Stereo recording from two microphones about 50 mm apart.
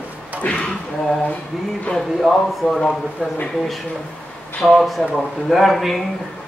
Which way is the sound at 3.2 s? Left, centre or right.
Centre.